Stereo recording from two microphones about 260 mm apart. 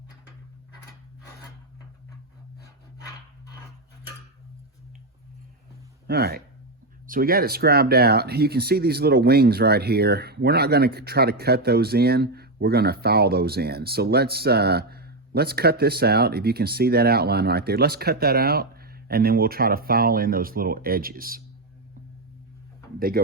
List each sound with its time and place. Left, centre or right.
6.1 s speech: right
23.0 s speech: right